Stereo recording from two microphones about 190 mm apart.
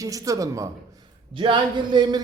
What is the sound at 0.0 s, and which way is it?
A man's voice, 15° right (ahead or behind).